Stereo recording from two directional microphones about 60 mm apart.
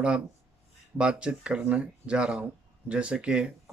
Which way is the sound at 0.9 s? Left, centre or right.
Centre.